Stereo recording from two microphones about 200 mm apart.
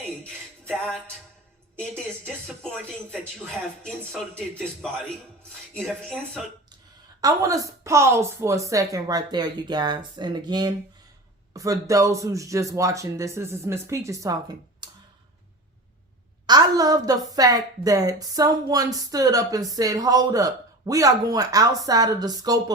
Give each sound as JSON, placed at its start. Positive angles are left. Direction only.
{"t": 0.7, "sound": "speech", "side_deg": 5}
{"t": 7.2, "sound": "a woman's voice", "side_deg": -15}
{"t": 16.5, "sound": "a woman's voice", "side_deg": -20}